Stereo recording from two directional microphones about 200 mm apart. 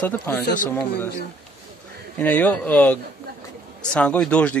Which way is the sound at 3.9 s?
5° left (ahead or behind).